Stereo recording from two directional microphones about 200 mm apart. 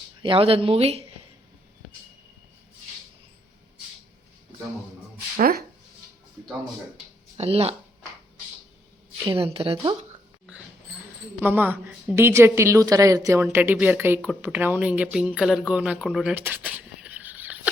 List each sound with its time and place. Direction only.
0.2 s speech: 25° right (ahead or behind)
7.3 s speech: 30° right (ahead or behind)
9.2 s speech: 25° right (ahead or behind)
11.3 s a woman's voice: 10° right (ahead or behind)
15.4 s a sound: 5° right (ahead or behind)